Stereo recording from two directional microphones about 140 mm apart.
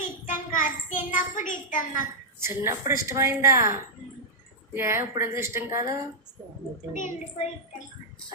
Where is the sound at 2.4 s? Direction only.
20° right (ahead or behind).